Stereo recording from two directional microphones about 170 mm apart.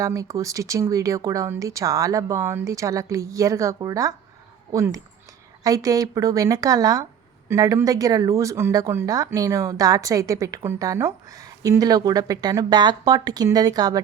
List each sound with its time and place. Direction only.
0.0 s speech: 20° right (ahead or behind)